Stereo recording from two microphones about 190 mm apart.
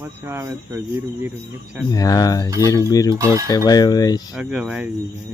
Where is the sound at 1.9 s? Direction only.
20° left (ahead or behind).